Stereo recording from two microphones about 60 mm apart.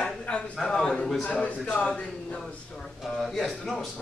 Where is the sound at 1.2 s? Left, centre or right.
Left.